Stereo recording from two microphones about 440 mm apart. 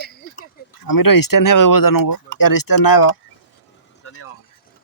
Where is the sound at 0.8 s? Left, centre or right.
Left.